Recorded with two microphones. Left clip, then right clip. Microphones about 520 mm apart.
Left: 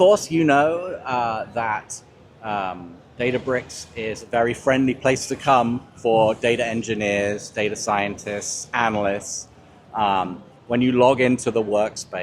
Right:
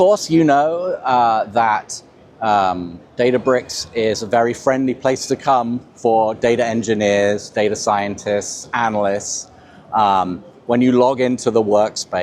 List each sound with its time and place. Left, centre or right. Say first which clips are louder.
0.0 s speech: right 3 dB; right